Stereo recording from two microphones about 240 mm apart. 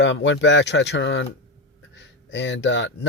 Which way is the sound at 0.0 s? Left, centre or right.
Left.